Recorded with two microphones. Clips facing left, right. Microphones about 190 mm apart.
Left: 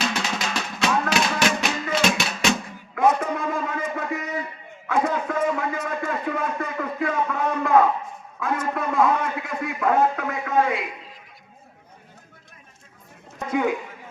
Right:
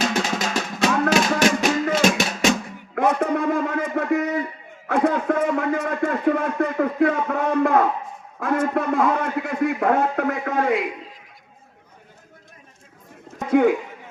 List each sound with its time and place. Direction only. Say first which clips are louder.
0.0 s music: right 4 dB; 45° right (ahead or behind)
3.0 s a sound: right 1 dB; 65° right (ahead or behind)
8.4 s a man's voice: right 5 dB; 65° right (ahead or behind)
13.5 s a man's voice: right 6 dB; 65° right (ahead or behind)